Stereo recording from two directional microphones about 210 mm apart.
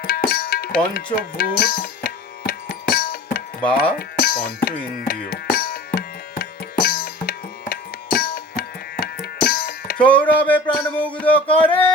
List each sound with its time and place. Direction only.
0.0 s tabla: 45° left (ahead or behind)
3.6 s speech: 5° left (ahead or behind)
3.9 s music: 45° left (ahead or behind)
10.0 s music: 5° left (ahead or behind)